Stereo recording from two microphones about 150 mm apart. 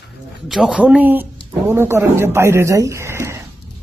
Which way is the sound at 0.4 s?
Centre (ahead or behind).